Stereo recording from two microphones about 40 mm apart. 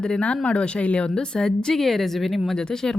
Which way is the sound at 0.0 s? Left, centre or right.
Left.